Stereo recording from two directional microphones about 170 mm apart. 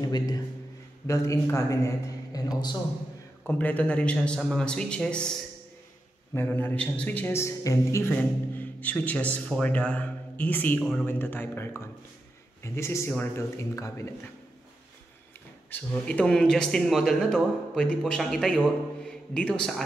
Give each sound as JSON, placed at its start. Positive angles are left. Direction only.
{"t": 0.0, "sound": "a man's voice", "side_deg": 20}
{"t": 3.4, "sound": "speech", "side_deg": 10}
{"t": 6.3, "sound": "a man's voice", "side_deg": 10}
{"t": 15.7, "sound": "a man's voice", "side_deg": 5}